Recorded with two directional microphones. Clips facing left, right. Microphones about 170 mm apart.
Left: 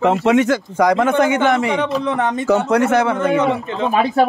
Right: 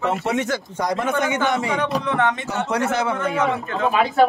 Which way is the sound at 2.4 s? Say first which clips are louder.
Left 8 dB; 60° left (ahead or behind).